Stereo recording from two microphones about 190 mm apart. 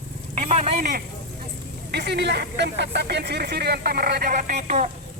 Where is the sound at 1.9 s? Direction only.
60° right (ahead or behind).